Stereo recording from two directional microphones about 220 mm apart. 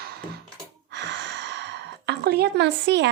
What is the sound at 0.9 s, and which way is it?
Sigh, 55° right (ahead or behind).